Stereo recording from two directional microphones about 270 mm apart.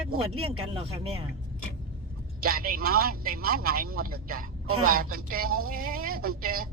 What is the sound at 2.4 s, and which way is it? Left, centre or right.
A man's voice, right.